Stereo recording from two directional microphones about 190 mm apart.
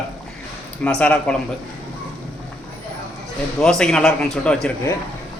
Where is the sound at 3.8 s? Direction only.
5° left (ahead or behind).